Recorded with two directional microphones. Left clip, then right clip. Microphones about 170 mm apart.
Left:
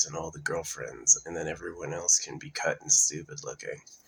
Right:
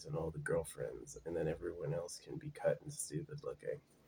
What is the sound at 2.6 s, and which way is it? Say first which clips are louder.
Speech: left 11 dB; 15° right (ahead or behind).